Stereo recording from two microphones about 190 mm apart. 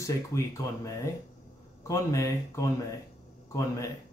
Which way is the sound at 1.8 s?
15° left (ahead or behind).